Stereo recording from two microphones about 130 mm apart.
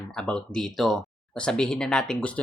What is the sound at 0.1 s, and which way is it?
Speech, 5° left (ahead or behind).